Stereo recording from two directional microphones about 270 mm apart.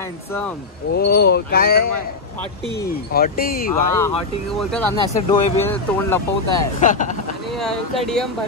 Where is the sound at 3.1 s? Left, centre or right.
Left.